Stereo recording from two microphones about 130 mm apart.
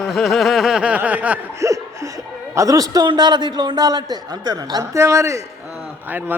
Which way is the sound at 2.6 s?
30° right (ahead or behind).